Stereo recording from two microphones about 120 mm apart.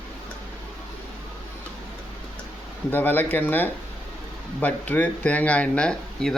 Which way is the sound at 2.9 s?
15° left (ahead or behind).